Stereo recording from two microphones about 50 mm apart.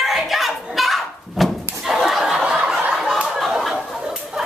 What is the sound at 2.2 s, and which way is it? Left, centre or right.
Snicker, centre.